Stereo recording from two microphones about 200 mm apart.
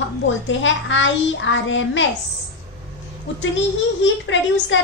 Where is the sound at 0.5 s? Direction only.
70° left (ahead or behind).